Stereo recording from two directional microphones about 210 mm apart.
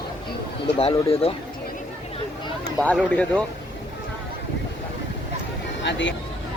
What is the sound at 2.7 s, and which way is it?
Speech, 5° left (ahead or behind).